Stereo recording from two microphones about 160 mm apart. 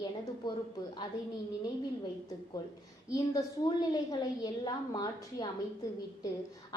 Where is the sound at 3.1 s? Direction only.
25° left (ahead or behind).